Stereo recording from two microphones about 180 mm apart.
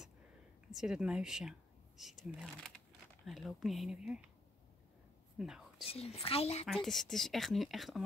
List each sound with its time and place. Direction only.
0.7 s speech: 5° right (ahead or behind)
5.4 s speech: centre (ahead or behind)
5.9 s speech: 35° left (ahead or behind)
6.6 s speech: centre (ahead or behind)